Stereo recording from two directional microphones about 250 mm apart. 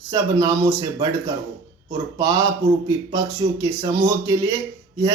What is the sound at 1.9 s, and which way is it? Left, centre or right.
Speech, centre.